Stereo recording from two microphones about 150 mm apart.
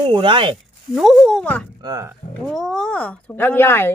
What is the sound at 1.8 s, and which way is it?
Speech, 20° right (ahead or behind).